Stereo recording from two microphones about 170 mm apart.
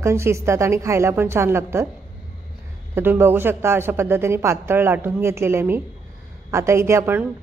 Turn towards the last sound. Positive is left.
turn(degrees=-10)  # may be behind; listen again after turning